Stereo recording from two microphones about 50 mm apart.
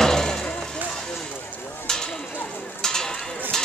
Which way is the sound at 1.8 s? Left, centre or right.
Centre.